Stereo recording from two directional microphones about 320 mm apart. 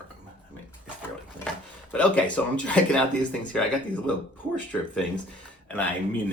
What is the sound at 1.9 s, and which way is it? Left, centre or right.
Speech, centre.